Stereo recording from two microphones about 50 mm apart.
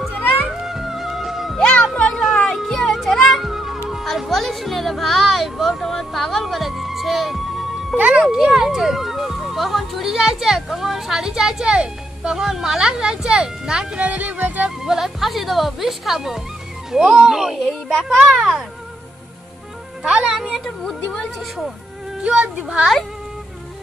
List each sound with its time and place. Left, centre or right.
0.1 s music: left
0.7 s music: centre
1.6 s music: left
2.3 s music: centre
3.4 s music: centre
4.3 s music: centre
8.2 s speech: centre
13.9 s speech: right
14.8 s speech: centre
17.6 s a child's voice: centre
18.0 s speech: centre
20.0 s speech: centre
22.3 s speech: right